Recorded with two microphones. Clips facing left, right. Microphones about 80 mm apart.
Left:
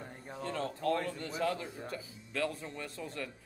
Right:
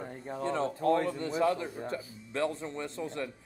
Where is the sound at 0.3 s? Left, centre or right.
Right.